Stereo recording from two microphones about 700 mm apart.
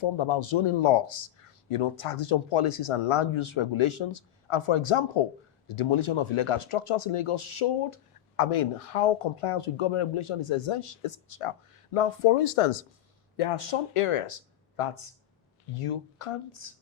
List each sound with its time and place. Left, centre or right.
0.0 s speech: left